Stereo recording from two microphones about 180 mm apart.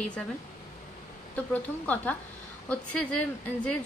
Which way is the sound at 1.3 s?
10° left (ahead or behind).